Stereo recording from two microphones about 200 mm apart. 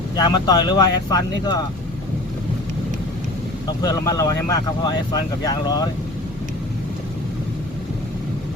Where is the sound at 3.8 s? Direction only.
20° left (ahead or behind).